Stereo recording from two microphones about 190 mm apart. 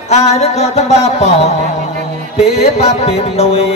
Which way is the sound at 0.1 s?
35° left (ahead or behind).